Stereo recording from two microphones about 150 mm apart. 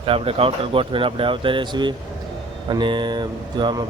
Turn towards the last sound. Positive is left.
turn(degrees=-30)  # may be behind; listen again after turning